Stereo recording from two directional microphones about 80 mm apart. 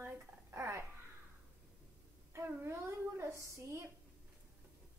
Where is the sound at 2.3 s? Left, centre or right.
Right.